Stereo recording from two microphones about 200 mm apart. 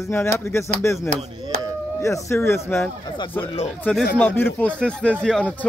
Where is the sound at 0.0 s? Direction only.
10° left (ahead or behind).